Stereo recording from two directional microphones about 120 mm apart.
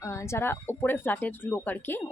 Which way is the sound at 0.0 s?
25° left (ahead or behind).